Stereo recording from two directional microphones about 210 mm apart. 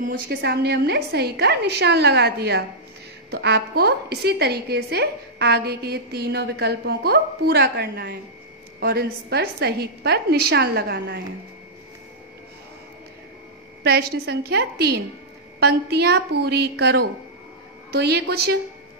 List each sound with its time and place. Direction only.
0.0 s a woman's voice: 40° right (ahead or behind)
13.8 s a woman's voice: 50° right (ahead or behind)